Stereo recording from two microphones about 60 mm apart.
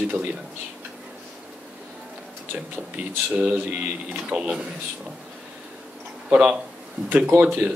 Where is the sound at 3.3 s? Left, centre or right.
Right.